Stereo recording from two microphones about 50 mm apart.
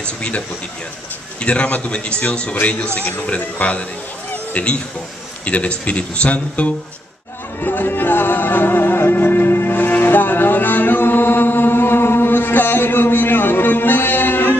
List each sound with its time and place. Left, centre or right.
0.0 s speech: left
1.4 s speech: left
7.6 s music: left